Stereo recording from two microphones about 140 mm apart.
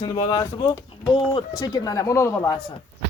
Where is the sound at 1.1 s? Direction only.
40° left (ahead or behind); by 2.6 s 20° left (ahead or behind).